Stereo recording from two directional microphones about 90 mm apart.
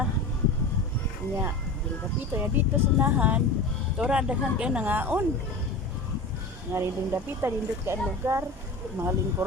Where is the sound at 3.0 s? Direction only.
20° right (ahead or behind).